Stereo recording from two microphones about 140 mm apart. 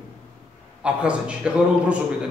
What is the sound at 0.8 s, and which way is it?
A man's voice, 10° right (ahead or behind).